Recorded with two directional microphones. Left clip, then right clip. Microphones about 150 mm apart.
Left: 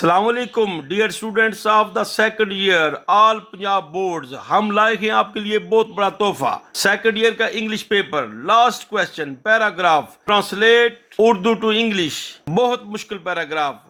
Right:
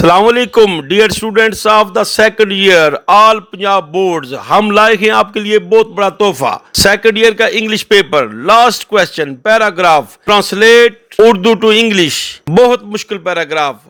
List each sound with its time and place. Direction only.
0.0 s a man's voice: 65° right (ahead or behind)